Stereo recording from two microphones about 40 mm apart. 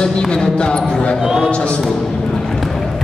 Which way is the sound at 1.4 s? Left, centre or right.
Left.